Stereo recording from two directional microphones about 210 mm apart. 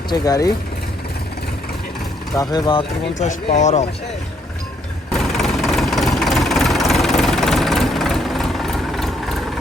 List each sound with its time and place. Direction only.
0.1 s speech: 15° left (ahead or behind)
2.3 s speech: 20° left (ahead or behind); by 3.8 s 35° left (ahead or behind)
5.4 s vehicle: centre (ahead or behind)